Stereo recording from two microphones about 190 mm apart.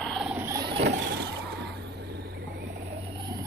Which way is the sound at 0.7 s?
70° right (ahead or behind).